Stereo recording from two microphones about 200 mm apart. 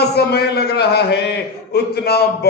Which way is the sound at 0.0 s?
55° left (ahead or behind).